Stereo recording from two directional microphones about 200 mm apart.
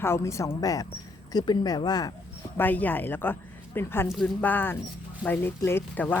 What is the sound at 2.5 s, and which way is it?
Speech, 10° left (ahead or behind).